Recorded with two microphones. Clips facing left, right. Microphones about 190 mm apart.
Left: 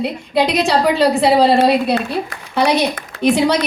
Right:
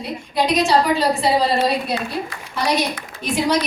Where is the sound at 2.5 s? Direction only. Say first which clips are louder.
Left 5 dB; 65° left (ahead or behind).